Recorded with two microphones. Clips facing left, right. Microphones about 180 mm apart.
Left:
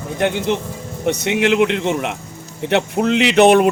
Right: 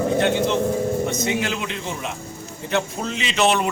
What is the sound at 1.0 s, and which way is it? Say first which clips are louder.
Speech: left 5 dB; 70° left (ahead or behind).